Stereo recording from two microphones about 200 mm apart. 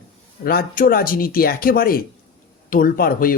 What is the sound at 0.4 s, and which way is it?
Speech, 50° left (ahead or behind).